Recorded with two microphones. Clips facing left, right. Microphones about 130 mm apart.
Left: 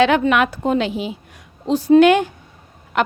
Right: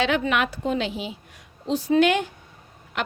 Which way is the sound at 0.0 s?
55° left (ahead or behind).